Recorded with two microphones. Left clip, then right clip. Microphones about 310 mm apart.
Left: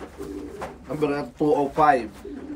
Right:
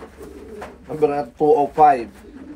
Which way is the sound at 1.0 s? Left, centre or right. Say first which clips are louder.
Right 7 dB; centre.